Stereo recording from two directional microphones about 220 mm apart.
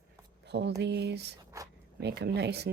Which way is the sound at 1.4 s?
15° right (ahead or behind).